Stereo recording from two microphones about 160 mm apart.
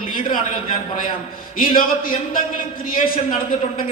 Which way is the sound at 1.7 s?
60° left (ahead or behind).